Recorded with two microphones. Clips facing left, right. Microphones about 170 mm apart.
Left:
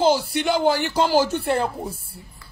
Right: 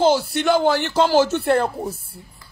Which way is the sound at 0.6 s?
10° left (ahead or behind).